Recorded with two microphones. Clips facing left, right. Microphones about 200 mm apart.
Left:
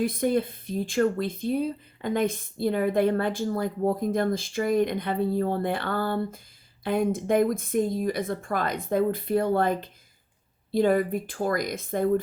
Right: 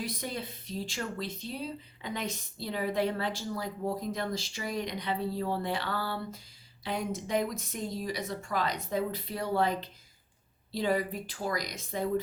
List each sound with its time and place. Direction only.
0.0 s speech: 50° left (ahead or behind)